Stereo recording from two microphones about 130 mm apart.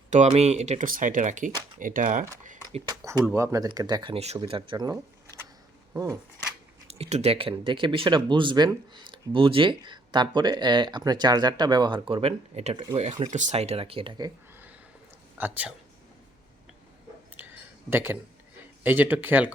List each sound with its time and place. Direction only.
0.1 s speech: 60° right (ahead or behind)
1.8 s speech: 90° right
3.0 s speech: 25° right (ahead or behind)
4.1 s speech: 55° right (ahead or behind)
4.4 s speech: 40° right (ahead or behind)
7.0 s speech: 50° right (ahead or behind)
12.7 s speech: 35° right (ahead or behind)
13.2 s speech: 70° right (ahead or behind); by 14.3 s 35° right (ahead or behind)
15.4 s speech: 15° right (ahead or behind)
17.3 s a sound: 15° right (ahead or behind)
18.8 s speech: 15° right (ahead or behind)